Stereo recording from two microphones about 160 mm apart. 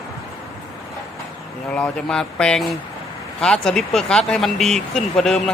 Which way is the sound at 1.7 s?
5° left (ahead or behind).